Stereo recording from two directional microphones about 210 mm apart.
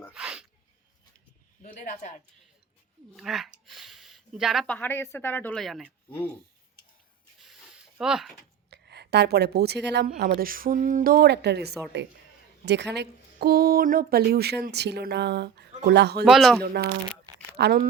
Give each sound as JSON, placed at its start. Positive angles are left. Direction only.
{"t": 0.1, "sound": "speech", "side_deg": -5}
{"t": 1.6, "sound": "speech", "side_deg": 40}
{"t": 3.2, "sound": "speech", "side_deg": 0}
{"t": 6.1, "sound": "speech", "side_deg": 10}
{"t": 7.3, "sound": "a sound", "side_deg": 0}
{"t": 8.7, "sound": "a woman's voice", "side_deg": -50}
{"t": 16.2, "sound": "speech", "side_deg": 0}
{"t": 16.6, "sound": "a woman's voice", "side_deg": -50}